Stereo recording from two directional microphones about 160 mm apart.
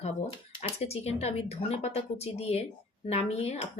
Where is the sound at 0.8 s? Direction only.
40° left (ahead or behind).